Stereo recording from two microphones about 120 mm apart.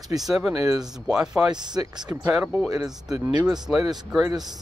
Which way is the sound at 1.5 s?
35° right (ahead or behind).